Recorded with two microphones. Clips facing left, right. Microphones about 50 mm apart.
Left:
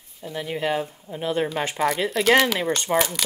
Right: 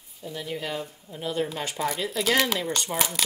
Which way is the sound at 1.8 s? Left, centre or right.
Left.